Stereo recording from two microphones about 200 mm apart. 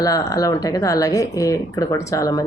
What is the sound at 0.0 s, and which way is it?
Speech, 15° left (ahead or behind).